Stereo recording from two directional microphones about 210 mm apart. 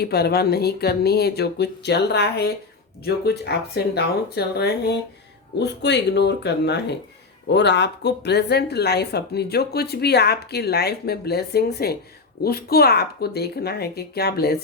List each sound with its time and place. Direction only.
0.0 s a woman's voice: 50° left (ahead or behind)